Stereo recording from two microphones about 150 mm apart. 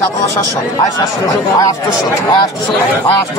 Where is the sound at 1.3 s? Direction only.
25° left (ahead or behind).